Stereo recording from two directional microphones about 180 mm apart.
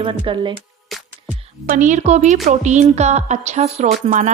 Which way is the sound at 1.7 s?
45° right (ahead or behind).